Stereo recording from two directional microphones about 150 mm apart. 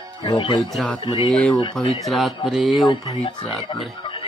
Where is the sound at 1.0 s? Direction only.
35° left (ahead or behind).